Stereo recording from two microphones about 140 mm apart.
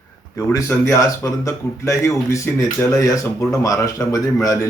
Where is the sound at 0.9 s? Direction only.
25° left (ahead or behind).